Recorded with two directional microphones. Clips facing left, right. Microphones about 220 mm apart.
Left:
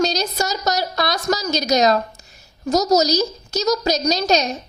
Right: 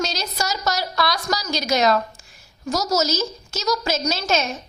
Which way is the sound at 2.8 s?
20° left (ahead or behind).